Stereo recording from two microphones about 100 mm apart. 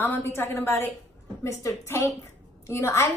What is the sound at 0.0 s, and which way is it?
A woman's voice, 25° left (ahead or behind).